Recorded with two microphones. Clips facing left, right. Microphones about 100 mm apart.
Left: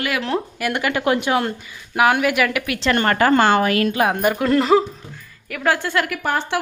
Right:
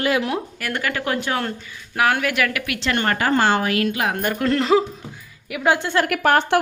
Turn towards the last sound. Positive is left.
turn(degrees=-60)  # may be behind; listen again after turning